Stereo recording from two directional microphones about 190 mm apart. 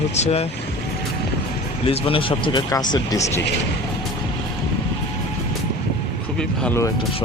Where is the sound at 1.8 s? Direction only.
30° left (ahead or behind).